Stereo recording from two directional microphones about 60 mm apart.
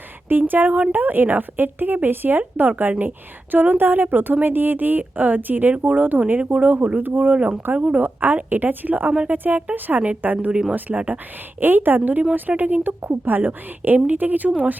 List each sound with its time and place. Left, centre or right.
0.3 s speech: right
6.4 s a woman's voice: centre
6.7 s a woman's voice: right
10.5 s speech: centre
10.8 s a woman's voice: right